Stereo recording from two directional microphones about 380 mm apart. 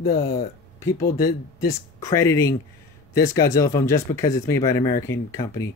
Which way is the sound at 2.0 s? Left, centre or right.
Centre.